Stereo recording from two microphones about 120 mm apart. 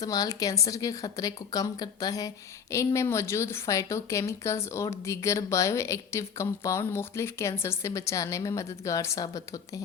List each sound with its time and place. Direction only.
0.0 s a woman's voice: 30° left (ahead or behind)